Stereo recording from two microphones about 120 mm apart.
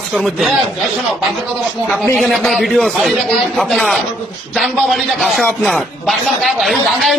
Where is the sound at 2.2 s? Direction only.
Centre (ahead or behind).